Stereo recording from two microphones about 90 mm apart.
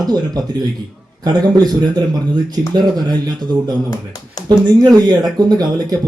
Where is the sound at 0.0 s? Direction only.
45° right (ahead or behind).